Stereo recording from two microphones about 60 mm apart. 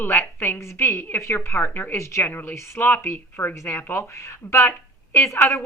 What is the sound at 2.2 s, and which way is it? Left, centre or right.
Speech, left.